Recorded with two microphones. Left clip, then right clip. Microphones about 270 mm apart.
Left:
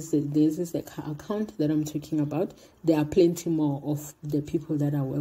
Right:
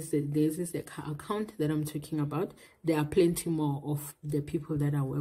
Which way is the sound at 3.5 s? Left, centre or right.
Right.